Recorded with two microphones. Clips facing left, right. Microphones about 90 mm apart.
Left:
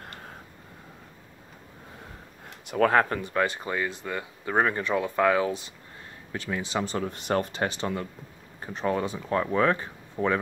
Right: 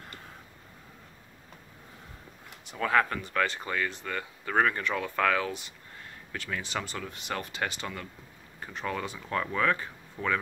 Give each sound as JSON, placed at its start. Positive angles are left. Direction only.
{"t": 2.6, "sound": "speech", "side_deg": 65}
{"t": 2.9, "sound": "speech", "side_deg": 35}
{"t": 3.3, "sound": "speech", "side_deg": 20}
{"t": 10.2, "sound": "speech", "side_deg": 40}